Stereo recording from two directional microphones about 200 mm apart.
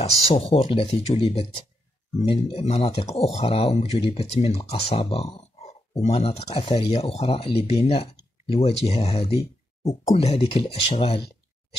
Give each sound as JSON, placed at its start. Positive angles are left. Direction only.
{"t": 0.0, "sound": "speech", "side_deg": 30}